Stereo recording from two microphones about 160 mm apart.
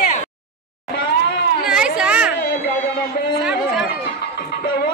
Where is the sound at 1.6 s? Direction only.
5° right (ahead or behind).